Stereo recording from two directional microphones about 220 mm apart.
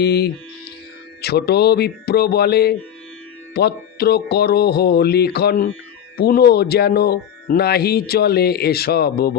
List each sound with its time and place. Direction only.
0.0 s speech: 45° left (ahead or behind)